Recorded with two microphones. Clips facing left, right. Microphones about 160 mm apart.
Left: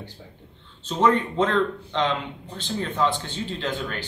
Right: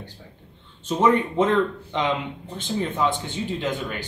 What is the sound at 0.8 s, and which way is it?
A man's voice, 10° right (ahead or behind).